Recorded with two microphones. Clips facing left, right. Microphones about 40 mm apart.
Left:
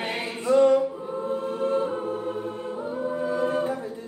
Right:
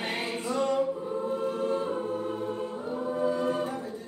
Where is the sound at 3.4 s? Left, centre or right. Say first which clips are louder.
Left 4 dB; left.